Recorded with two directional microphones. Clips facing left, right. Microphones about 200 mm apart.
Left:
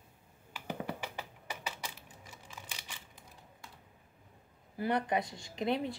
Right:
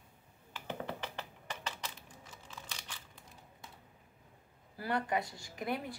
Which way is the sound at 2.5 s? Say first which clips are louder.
Even; 10° left (ahead or behind).